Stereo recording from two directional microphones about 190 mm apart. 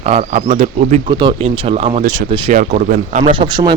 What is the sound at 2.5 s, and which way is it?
Speech, 45° right (ahead or behind).